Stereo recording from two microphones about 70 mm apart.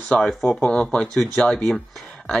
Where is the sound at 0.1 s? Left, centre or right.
Centre.